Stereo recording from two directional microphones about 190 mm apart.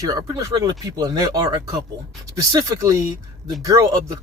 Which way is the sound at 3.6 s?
20° right (ahead or behind).